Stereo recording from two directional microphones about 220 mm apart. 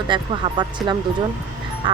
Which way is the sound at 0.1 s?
20° right (ahead or behind).